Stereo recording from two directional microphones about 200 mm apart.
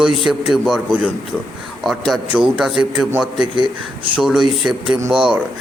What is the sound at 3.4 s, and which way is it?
Speech, 25° right (ahead or behind).